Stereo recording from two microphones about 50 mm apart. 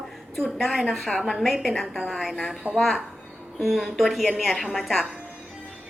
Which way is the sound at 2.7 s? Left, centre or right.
Right.